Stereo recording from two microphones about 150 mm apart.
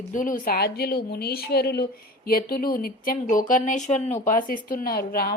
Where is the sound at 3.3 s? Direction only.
60° left (ahead or behind).